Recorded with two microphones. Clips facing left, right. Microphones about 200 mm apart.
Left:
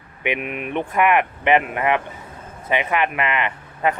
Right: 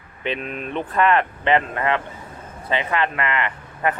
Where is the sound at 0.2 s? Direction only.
15° left (ahead or behind).